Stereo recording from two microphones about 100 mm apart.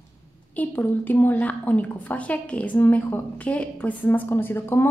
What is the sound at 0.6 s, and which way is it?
A woman's voice, 20° left (ahead or behind).